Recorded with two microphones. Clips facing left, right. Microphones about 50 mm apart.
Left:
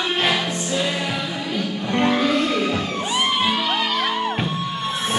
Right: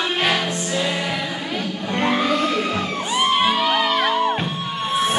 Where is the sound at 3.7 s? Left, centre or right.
Centre.